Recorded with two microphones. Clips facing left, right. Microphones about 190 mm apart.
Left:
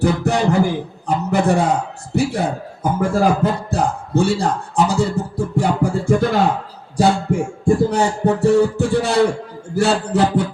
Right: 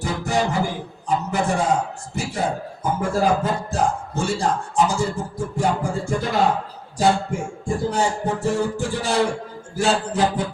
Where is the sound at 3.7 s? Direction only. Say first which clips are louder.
Left 4 dB; 60° left (ahead or behind).